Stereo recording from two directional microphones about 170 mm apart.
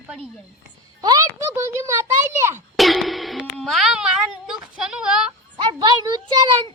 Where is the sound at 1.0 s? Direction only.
20° right (ahead or behind).